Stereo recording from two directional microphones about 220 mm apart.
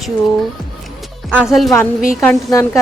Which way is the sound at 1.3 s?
5° right (ahead or behind).